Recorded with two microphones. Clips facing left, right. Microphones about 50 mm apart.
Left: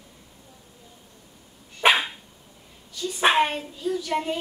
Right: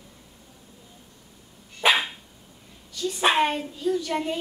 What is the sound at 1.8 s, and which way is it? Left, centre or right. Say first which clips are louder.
Dog: left 2 dB; left.